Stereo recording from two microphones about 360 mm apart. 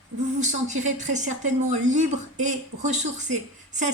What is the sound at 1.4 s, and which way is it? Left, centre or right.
A woman's voice, centre.